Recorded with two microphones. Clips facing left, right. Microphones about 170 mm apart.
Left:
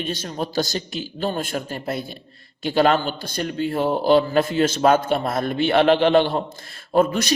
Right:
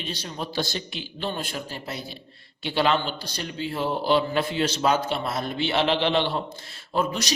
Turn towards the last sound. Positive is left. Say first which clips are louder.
# left 7 dB
turn(degrees=55)  # may be behind; listen again after turning